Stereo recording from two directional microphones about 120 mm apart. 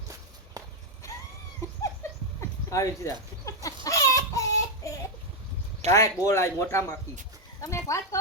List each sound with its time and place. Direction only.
0.6 s walk: 30° right (ahead or behind)
2.6 s chicken: 25° left (ahead or behind)
5.9 s speech: 25° left (ahead or behind)